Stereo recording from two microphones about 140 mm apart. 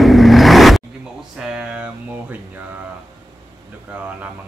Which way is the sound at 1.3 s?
5° right (ahead or behind).